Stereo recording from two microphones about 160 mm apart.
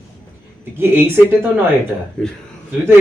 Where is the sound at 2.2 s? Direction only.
5° left (ahead or behind).